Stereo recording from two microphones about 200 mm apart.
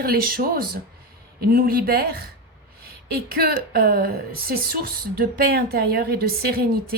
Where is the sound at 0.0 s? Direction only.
50° right (ahead or behind).